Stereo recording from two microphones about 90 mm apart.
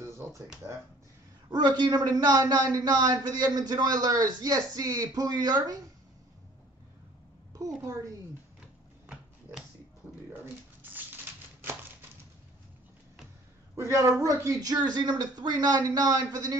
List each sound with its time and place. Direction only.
0.0 s a sound: 30° right (ahead or behind)
0.6 s speech: 25° right (ahead or behind)
1.5 s a man's voice: 50° right (ahead or behind)
7.5 s a woman's voice: 35° right (ahead or behind)
10.4 s shuffling cards: 20° right (ahead or behind)
13.7 s a woman's voice: 30° right (ahead or behind)